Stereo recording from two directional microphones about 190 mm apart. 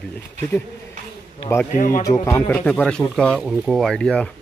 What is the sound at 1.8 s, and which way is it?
Speech, 45° left (ahead or behind).